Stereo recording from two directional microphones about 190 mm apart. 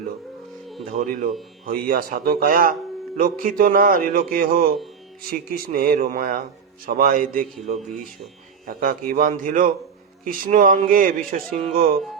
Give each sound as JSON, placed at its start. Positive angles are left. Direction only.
{"t": 0.9, "sound": "speech", "side_deg": -45}
{"t": 8.6, "sound": "speech", "side_deg": -45}